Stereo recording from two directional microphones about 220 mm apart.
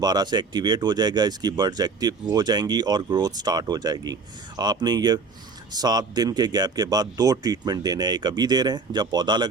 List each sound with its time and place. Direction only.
0.0 s speech: 20° right (ahead or behind)